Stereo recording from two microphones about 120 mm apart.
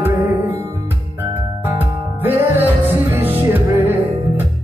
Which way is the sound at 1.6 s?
15° right (ahead or behind).